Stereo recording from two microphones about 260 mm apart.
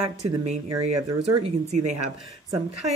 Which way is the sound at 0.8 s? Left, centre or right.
Right.